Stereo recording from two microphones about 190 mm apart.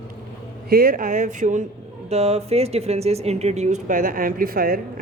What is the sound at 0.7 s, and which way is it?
Speech, 50° right (ahead or behind).